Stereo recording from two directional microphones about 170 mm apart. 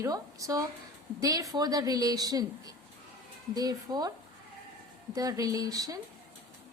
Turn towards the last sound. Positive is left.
turn(degrees=-20)  # may be behind; listen again after turning